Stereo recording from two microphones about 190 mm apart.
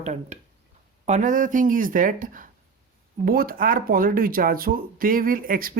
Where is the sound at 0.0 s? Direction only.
35° right (ahead or behind).